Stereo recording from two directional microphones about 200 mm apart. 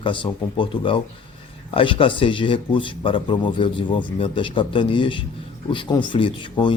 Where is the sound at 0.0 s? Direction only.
25° left (ahead or behind).